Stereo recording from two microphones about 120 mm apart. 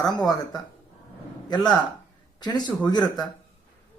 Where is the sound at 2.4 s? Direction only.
35° left (ahead or behind).